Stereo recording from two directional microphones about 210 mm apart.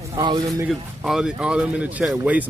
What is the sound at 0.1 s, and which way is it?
Speech, 20° right (ahead or behind).